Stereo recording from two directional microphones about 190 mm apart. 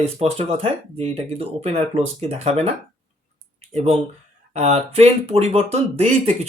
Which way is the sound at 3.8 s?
35° right (ahead or behind).